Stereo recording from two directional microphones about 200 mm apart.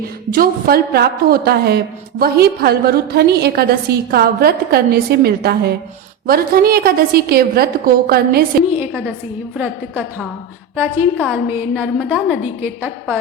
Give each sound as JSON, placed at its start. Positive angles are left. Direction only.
{"t": 0.3, "sound": "a woman's voice", "side_deg": -45}
{"t": 9.6, "sound": "a woman's voice", "side_deg": -10}